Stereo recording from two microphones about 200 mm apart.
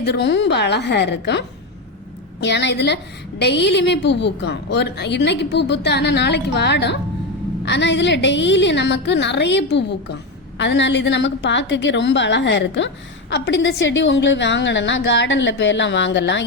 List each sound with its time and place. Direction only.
0.0 s a woman's voice: 60° left (ahead or behind)